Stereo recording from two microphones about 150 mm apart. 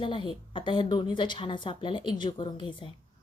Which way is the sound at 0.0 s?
35° left (ahead or behind).